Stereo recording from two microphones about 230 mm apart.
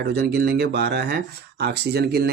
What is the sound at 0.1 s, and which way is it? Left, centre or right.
Speech, right.